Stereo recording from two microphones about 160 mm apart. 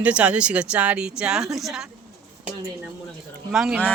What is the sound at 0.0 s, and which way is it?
Speech, 10° right (ahead or behind).